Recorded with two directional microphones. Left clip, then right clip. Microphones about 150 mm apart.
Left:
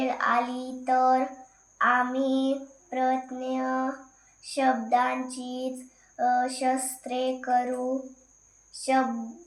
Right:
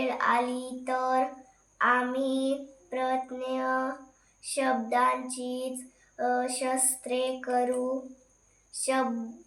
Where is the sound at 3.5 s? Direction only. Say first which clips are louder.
Even; 15° right (ahead or behind).